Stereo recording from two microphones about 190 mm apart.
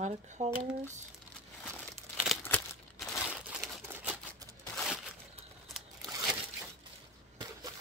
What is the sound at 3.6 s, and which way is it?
Crumpling, 10° right (ahead or behind).